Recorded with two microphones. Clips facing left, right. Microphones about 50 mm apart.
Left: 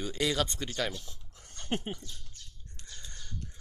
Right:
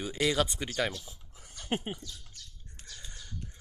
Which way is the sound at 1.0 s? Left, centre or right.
Centre.